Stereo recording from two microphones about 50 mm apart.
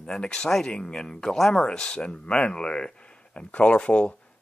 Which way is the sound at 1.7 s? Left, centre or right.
Centre.